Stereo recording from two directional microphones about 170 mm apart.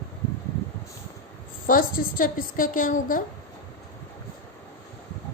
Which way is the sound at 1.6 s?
55° left (ahead or behind).